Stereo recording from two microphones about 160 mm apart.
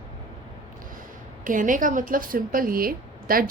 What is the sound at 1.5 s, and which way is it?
A woman's voice, 55° right (ahead or behind).